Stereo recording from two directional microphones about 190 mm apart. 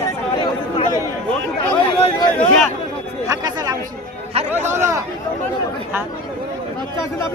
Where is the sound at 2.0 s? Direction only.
25° left (ahead or behind).